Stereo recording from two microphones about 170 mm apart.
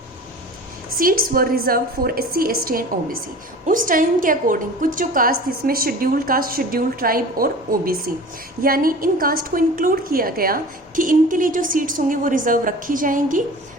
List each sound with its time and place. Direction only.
0.9 s a woman's voice: 55° right (ahead or behind)